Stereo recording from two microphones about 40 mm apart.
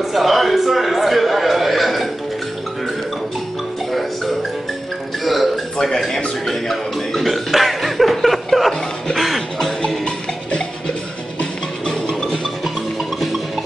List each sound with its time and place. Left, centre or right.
0.0 s a sound: centre
5.2 s music: centre
5.8 s music: centre
6.4 s burping: centre
9.1 s music: centre
11.8 s music: centre